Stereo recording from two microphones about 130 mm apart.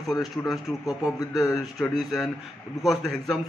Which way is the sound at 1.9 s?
Centre (ahead or behind).